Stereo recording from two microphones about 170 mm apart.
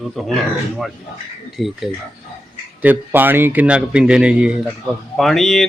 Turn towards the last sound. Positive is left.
turn(degrees=0)  # may be behind; listen again after turning